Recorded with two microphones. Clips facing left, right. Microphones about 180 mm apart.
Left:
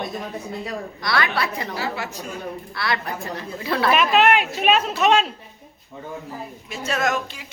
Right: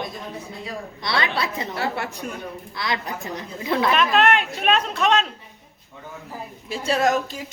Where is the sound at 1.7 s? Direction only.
60° right (ahead or behind).